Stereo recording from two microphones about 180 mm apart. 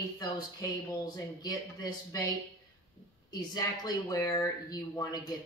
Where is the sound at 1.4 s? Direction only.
20° left (ahead or behind).